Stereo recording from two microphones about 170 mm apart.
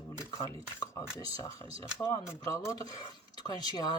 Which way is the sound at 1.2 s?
20° left (ahead or behind).